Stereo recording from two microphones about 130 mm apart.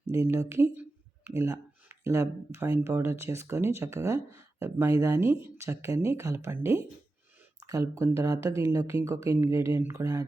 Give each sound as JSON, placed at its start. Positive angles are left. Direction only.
{"t": 0.1, "sound": "speech", "side_deg": -25}